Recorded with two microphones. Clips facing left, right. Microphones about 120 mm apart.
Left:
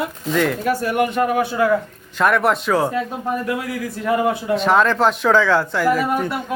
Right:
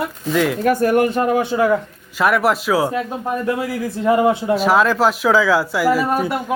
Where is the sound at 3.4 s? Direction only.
25° right (ahead or behind).